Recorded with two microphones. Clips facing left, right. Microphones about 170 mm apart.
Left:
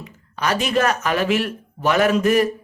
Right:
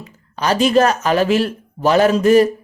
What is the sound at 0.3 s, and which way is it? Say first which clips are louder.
Speech: right 6 dB; 30° right (ahead or behind).